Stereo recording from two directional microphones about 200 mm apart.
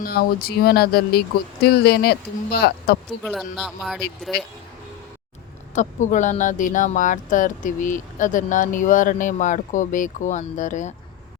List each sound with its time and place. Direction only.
0.0 s speech: 50° left (ahead or behind)
3.2 s speech: centre (ahead or behind)
5.7 s speech: 40° left (ahead or behind)